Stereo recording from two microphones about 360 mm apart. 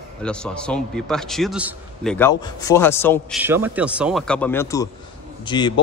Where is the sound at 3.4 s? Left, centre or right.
Centre.